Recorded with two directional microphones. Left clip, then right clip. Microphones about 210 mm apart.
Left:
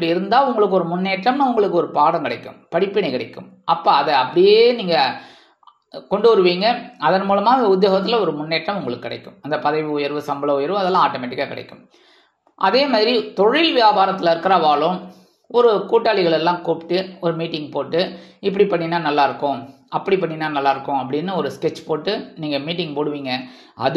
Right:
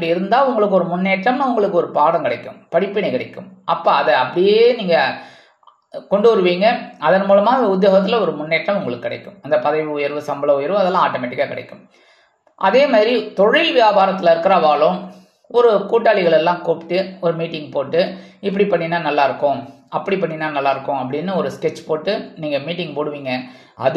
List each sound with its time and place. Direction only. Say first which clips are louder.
0.0 s a man's voice: right 1 dB; 25° left (ahead or behind)
12.5 s a man's voice: right 3 dB; 20° left (ahead or behind)